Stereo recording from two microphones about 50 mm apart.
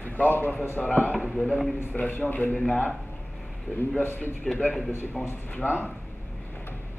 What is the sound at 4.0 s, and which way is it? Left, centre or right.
Speech, left.